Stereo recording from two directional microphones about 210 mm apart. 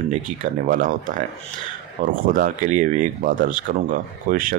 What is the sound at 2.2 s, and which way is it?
Speech, 40° right (ahead or behind).